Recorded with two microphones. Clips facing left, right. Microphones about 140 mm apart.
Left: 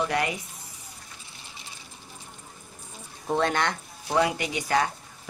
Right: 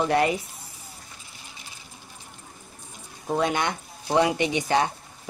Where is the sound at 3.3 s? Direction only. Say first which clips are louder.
Right 1 dB; 10° right (ahead or behind).